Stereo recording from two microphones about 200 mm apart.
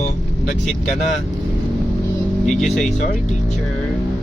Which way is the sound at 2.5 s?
Centre (ahead or behind).